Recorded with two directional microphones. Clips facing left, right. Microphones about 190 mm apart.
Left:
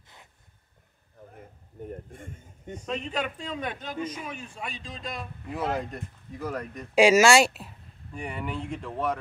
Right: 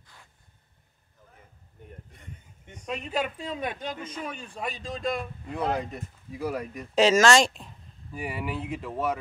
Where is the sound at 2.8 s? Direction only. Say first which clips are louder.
Right 1 dB; 10° right (ahead or behind).